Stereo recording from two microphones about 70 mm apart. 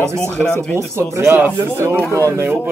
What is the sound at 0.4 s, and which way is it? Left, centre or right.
Speech, centre.